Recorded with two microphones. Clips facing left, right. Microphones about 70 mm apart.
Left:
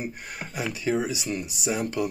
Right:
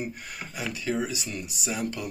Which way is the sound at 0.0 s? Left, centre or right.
Left.